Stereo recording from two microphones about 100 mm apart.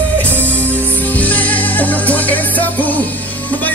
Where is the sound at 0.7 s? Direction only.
15° left (ahead or behind).